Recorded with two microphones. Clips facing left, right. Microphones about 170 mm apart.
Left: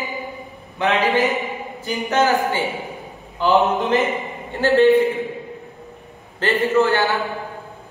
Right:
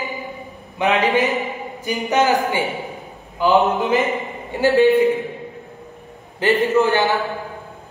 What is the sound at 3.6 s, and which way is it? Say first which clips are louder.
Speech: even; centre (ahead or behind).